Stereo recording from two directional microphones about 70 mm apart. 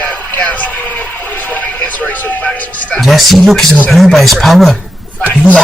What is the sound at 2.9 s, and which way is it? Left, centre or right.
Speech, centre.